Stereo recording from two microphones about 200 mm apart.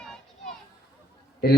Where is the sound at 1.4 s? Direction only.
50° left (ahead or behind).